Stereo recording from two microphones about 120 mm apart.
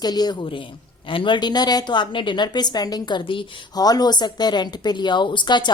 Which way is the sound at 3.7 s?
35° left (ahead or behind).